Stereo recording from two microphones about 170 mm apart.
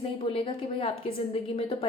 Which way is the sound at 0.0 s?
30° left (ahead or behind).